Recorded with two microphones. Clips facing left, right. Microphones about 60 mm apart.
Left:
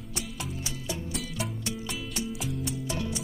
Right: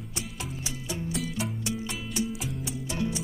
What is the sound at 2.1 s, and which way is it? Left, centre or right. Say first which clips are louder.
Music: right 3 dB; centre.